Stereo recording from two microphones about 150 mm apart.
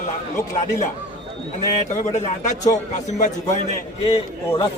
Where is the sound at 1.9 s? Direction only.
55° left (ahead or behind).